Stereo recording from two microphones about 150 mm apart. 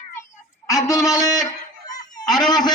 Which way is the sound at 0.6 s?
20° left (ahead or behind).